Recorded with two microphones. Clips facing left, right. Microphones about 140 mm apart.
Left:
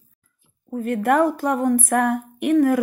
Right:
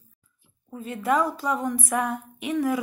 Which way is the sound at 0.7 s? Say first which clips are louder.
Left 6 dB; 60° left (ahead or behind).